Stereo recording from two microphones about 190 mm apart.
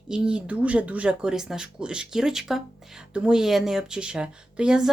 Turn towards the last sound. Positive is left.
turn(degrees=-5)  # may be behind; listen again after turning